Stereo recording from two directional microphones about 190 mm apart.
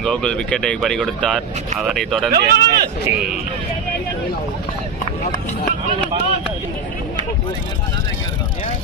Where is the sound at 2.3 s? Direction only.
60° right (ahead or behind).